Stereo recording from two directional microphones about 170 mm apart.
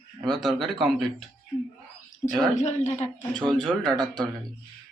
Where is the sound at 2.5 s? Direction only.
45° left (ahead or behind).